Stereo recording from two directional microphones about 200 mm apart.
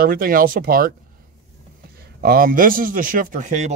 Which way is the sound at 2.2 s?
45° right (ahead or behind).